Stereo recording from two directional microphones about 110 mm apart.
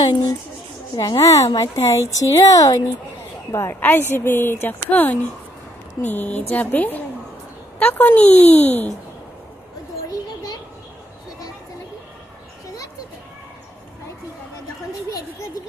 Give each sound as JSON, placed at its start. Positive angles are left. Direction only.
{"t": 0.0, "sound": "a woman's voice", "side_deg": 45}
{"t": 3.5, "sound": "speech", "side_deg": 20}